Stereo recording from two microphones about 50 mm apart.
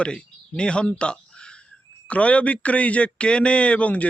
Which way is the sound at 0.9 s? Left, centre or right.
Left.